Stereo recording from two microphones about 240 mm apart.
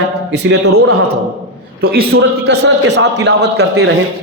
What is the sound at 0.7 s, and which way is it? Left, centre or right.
Speech, right.